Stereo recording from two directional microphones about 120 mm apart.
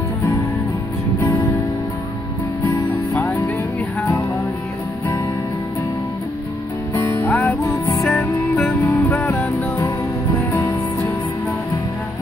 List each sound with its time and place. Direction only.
3.2 s music: 15° left (ahead or behind)
7.2 s music: 15° left (ahead or behind)
7.6 s music: 25° left (ahead or behind)